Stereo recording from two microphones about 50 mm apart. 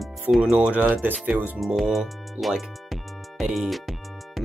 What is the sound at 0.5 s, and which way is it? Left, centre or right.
Speech, right.